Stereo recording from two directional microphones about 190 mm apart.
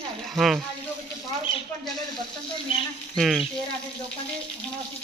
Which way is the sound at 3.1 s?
Centre (ahead or behind).